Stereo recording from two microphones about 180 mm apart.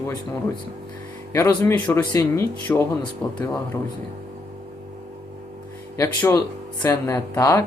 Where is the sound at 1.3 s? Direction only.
15° left (ahead or behind).